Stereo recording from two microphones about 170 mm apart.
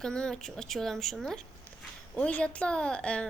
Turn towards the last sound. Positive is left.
turn(degrees=5)  # may be behind; listen again after turning